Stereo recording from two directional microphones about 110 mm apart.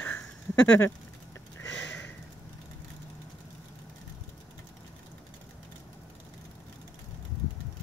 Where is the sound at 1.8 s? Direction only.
15° left (ahead or behind).